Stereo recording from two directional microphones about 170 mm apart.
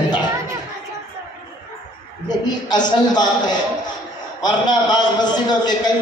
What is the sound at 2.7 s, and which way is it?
Speech, 25° left (ahead or behind).